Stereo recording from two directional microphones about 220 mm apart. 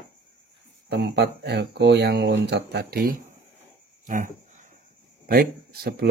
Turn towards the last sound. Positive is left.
turn(degrees=-45)  # may be behind; listen again after turning